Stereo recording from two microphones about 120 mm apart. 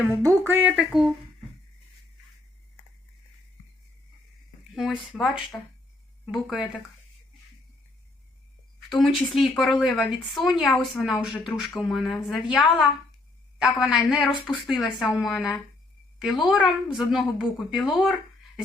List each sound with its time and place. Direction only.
0.1 s speech: 25° right (ahead or behind)
0.8 s speech: 5° right (ahead or behind)
4.7 s speech: centre (ahead or behind)
8.9 s a woman's voice: centre (ahead or behind)